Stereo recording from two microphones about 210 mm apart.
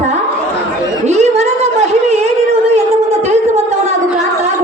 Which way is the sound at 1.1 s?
30° right (ahead or behind).